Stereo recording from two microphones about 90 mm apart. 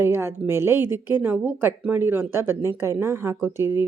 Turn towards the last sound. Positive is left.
turn(degrees=-25)  # may be behind; listen again after turning